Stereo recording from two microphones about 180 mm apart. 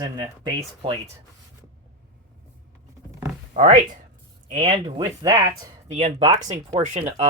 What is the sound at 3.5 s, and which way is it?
Speech, 35° right (ahead or behind).